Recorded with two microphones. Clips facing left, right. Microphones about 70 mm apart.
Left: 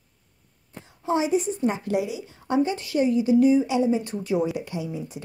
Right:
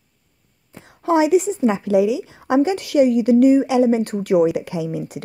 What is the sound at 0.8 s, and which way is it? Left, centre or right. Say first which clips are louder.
A woman's voice: right 7 dB; right.